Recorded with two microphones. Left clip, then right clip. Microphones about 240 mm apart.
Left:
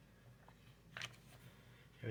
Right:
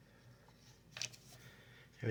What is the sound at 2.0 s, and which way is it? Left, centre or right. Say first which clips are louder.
Speech: right 8 dB; right.